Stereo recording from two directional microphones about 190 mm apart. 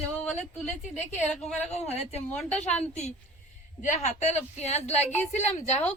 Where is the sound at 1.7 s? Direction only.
35° left (ahead or behind).